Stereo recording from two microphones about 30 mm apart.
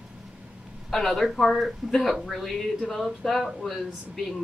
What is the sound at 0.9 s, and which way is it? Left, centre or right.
Speech, centre.